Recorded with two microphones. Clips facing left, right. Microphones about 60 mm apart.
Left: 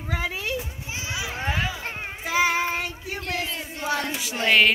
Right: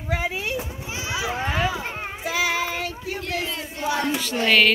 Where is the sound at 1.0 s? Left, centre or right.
Right.